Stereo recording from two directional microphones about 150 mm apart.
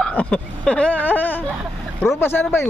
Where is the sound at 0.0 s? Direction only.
10° left (ahead or behind).